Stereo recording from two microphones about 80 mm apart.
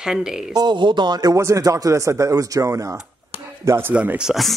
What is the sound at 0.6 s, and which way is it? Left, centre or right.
Speech, right.